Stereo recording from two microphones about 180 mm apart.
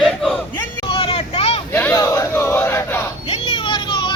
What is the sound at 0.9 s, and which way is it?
Vehicle, 30° left (ahead or behind).